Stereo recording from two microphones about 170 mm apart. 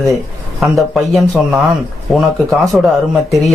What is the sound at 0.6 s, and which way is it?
Speech, centre (ahead or behind).